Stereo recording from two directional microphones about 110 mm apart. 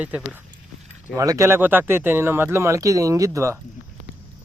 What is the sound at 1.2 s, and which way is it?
Speech, 30° right (ahead or behind).